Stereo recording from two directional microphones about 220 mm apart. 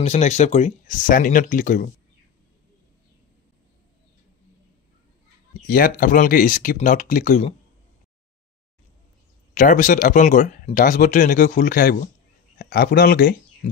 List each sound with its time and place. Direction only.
0.0 s speech: 30° left (ahead or behind)
5.7 s speech: 40° left (ahead or behind)
9.5 s speech: 35° left (ahead or behind)